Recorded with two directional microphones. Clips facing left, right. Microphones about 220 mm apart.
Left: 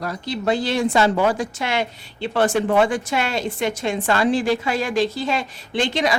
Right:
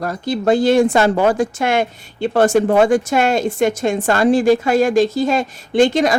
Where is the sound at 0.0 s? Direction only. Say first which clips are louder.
Right 6 dB; 50° right (ahead or behind).